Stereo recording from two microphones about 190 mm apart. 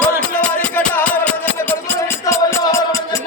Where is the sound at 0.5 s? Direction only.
10° left (ahead or behind).